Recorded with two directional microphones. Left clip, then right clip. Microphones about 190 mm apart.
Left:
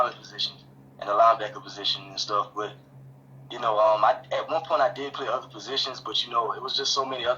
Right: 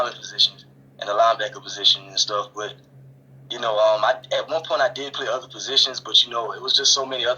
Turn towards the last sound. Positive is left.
turn(degrees=-50)  # may be behind; listen again after turning